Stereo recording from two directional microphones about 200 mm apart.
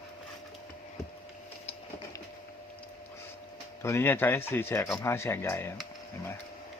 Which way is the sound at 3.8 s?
10° left (ahead or behind).